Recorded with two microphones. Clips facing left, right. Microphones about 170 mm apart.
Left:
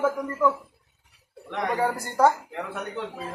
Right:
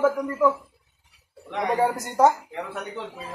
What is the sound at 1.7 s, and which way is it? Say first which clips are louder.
Speech: right 4 dB; 20° right (ahead or behind).